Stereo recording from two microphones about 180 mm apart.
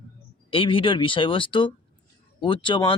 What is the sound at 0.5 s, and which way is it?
Speech, 30° left (ahead or behind).